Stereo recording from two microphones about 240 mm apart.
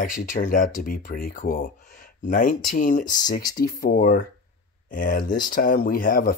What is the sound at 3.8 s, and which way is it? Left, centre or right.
Speech, left.